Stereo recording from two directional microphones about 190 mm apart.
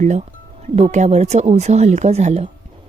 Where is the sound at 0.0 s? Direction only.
40° right (ahead or behind).